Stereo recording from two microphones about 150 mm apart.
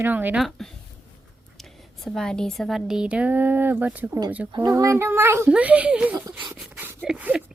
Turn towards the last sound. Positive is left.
turn(degrees=-5)  # may be behind; listen again after turning